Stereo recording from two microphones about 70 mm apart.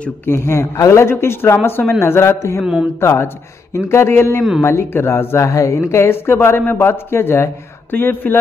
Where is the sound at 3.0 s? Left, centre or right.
Left.